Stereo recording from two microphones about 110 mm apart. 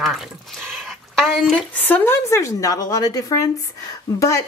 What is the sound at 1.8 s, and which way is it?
A woman's voice, 15° left (ahead or behind).